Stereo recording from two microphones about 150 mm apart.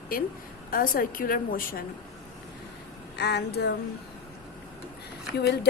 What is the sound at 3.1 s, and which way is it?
Speech, 90° left.